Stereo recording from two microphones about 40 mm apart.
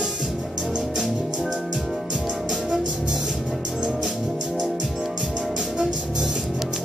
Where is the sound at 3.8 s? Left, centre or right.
Centre.